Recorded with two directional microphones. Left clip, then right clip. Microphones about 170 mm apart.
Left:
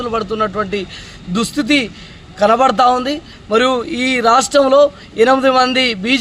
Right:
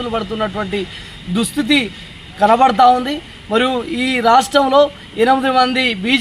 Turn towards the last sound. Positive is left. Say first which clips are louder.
# left 1 dB
turn(degrees=30)  # may be behind; listen again after turning